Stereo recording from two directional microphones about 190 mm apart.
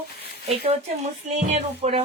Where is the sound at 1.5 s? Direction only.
35° right (ahead or behind).